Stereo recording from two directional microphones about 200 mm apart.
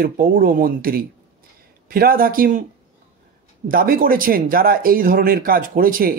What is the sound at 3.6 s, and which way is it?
Speech, 45° right (ahead or behind).